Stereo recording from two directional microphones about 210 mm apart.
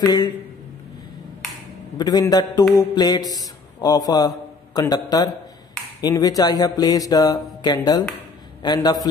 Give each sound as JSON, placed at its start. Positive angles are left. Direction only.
{"t": 0.0, "sound": "speech", "side_deg": 20}
{"t": 2.0, "sound": "a man's voice", "side_deg": 20}